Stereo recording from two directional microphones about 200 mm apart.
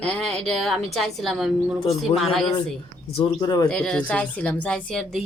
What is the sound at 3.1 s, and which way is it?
Speech, 25° left (ahead or behind).